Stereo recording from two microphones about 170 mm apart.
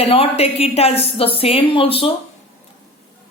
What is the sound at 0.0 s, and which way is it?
A woman's voice, 35° left (ahead or behind).